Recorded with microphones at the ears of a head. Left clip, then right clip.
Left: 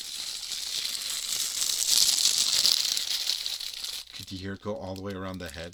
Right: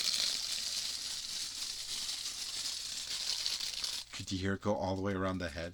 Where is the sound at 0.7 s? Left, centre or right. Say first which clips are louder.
Left 6 dB; left.